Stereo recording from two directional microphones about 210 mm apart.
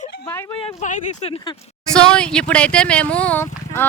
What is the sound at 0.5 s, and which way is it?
Speech, 25° left (ahead or behind).